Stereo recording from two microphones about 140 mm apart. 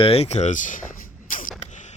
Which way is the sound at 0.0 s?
45° left (ahead or behind).